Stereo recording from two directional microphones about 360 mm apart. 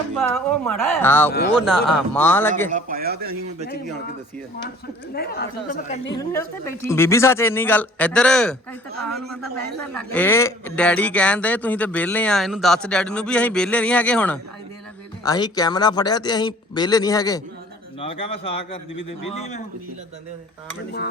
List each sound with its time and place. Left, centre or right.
0.2 s a man's voice: centre
2.6 s a man's voice: right
5.1 s speech: left
6.1 s a man's voice: centre